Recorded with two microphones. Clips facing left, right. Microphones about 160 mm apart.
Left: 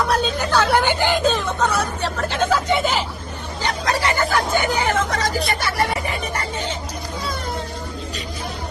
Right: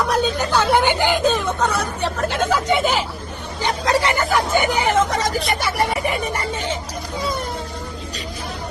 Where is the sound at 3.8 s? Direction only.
20° right (ahead or behind).